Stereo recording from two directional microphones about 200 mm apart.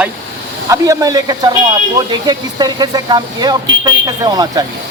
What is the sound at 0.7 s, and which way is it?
Speech, 15° right (ahead or behind).